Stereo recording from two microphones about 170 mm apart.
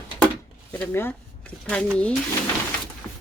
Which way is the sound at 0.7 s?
10° left (ahead or behind).